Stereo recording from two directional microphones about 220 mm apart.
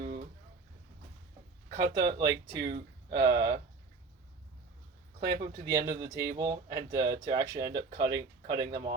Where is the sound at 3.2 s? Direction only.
20° right (ahead or behind).